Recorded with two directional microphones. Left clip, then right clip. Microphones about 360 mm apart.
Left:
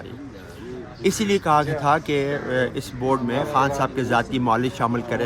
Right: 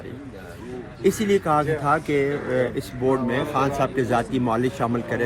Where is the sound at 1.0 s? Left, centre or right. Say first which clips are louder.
Even; centre.